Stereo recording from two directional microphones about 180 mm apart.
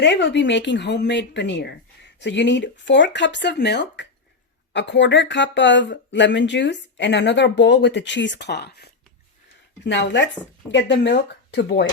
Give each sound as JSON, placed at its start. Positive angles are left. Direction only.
{"t": 0.0, "sound": "a woman's voice", "side_deg": 80}